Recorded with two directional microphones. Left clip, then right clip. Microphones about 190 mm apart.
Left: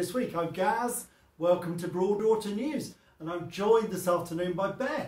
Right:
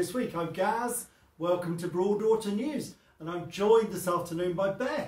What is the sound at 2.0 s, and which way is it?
Speech, 20° left (ahead or behind).